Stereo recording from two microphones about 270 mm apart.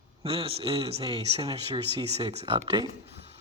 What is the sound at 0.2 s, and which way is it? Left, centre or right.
Speech, right.